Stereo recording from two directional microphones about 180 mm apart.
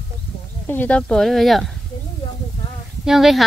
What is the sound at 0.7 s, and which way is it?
Speech, 10° left (ahead or behind).